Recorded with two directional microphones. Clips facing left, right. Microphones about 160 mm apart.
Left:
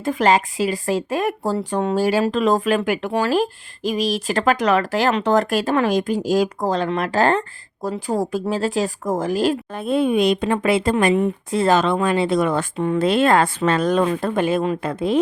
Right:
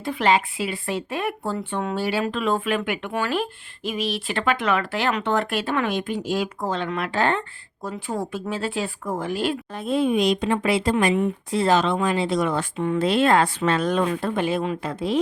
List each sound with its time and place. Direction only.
0.0 s speech: 40° left (ahead or behind)
9.8 s speech: 55° left (ahead or behind)